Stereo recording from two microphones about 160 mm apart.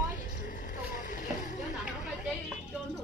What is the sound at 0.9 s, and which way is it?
Boat, 55° left (ahead or behind).